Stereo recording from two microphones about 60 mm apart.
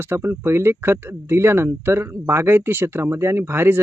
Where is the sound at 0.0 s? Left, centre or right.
Right.